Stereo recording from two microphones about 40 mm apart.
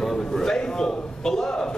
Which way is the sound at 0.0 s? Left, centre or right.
Centre.